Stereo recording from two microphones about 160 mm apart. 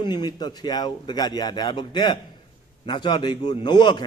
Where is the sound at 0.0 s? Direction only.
25° left (ahead or behind).